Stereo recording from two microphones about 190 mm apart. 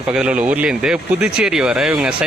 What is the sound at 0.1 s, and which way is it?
Speech, 5° right (ahead or behind).